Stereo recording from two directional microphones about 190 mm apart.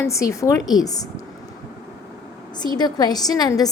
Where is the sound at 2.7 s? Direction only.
20° left (ahead or behind).